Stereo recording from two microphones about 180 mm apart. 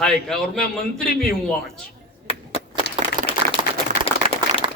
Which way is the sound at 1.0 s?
55° left (ahead or behind).